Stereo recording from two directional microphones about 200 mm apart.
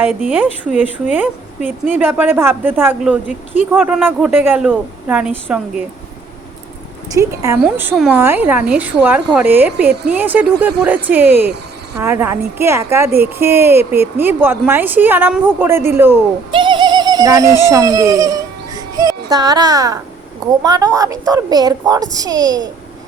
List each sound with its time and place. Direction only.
0.0 s a woman's voice: 5° right (ahead or behind)
7.1 s a woman's voice: 15° right (ahead or behind)
16.5 s bird: 25° right (ahead or behind)
17.7 s a woman's voice: 15° right (ahead or behind)